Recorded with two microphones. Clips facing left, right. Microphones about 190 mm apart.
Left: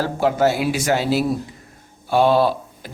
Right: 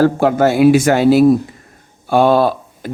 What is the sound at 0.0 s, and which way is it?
Speech, 55° right (ahead or behind).